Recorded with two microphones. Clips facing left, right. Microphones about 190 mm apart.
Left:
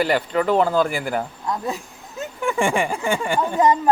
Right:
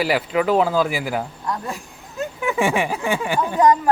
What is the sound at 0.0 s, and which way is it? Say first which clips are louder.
Speech: even; 5° right (ahead or behind).